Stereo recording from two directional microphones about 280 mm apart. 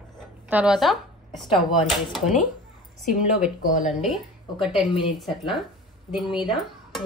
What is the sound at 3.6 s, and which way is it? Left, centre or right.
Speech, left.